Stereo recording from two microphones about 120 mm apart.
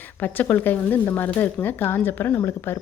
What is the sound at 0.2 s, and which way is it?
Speech, 15° left (ahead or behind).